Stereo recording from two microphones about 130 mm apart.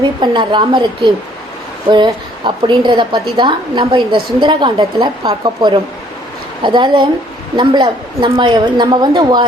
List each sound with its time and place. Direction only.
0.2 s a woman's voice: 35° right (ahead or behind)
6.6 s a woman's voice: 35° right (ahead or behind)